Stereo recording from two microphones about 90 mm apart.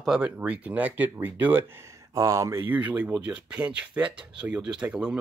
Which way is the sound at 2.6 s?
20° right (ahead or behind).